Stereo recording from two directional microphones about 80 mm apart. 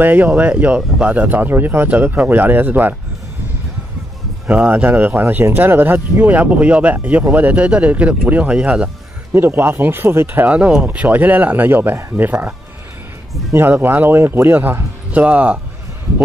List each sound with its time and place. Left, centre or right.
0.0 s speech: right
4.5 s speech: right
9.3 s speech: right